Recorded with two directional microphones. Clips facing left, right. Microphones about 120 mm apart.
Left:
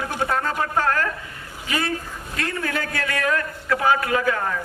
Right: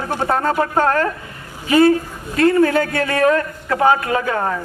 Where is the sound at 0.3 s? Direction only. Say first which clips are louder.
Right 6 dB; 40° right (ahead or behind).